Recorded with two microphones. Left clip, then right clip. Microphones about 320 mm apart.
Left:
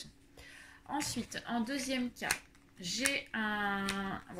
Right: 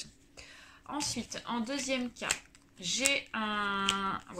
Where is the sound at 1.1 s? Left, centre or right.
Right.